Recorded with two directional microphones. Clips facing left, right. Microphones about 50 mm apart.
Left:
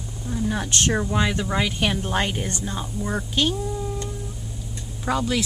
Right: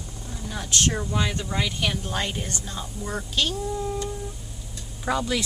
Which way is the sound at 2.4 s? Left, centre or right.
Left.